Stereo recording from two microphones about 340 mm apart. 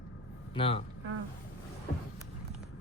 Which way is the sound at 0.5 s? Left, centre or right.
Centre.